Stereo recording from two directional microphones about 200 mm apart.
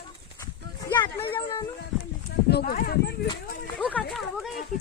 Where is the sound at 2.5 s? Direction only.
50° left (ahead or behind).